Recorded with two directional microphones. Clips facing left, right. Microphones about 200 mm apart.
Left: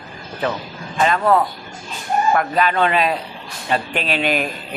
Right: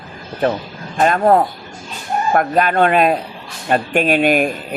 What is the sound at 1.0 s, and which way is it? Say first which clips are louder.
Speech: right 3 dB; 45° right (ahead or behind).